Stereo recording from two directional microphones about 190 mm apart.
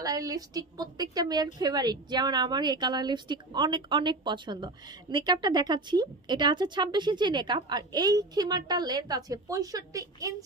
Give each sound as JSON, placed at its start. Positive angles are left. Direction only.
{"t": 0.0, "sound": "speech", "side_deg": -20}